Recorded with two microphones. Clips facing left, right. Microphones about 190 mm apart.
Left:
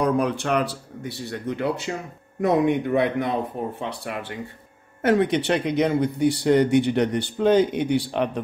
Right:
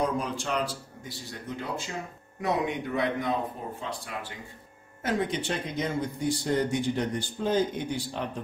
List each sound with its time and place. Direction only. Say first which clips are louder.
0.0 s speech: left 7 dB; 65° left (ahead or behind)
2.4 s speech: left 9 dB; 50° left (ahead or behind)